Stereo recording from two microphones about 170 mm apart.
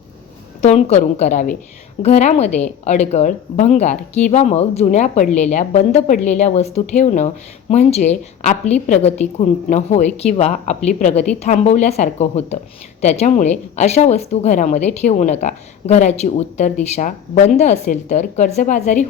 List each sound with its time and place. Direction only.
0.6 s speech: 40° left (ahead or behind)